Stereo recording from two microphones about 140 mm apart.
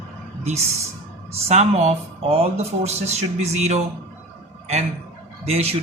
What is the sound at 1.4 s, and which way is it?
Speech, 50° right (ahead or behind).